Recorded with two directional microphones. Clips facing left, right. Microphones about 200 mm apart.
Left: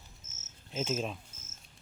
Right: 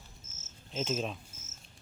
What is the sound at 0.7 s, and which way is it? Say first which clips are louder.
Speech: even; 10° left (ahead or behind).